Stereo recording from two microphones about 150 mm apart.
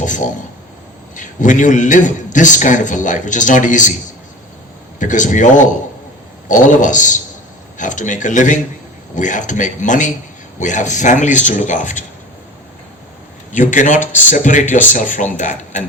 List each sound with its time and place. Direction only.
0.0 s a sound: 55° left (ahead or behind)
1.1 s a man's voice: 55° left (ahead or behind)
4.9 s a man's voice: 55° left (ahead or behind)
13.5 s a man's voice: 55° left (ahead or behind)